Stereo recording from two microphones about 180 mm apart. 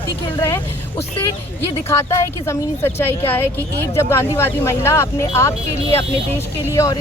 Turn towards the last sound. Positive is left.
turn(degrees=15)  # may be behind; listen again after turning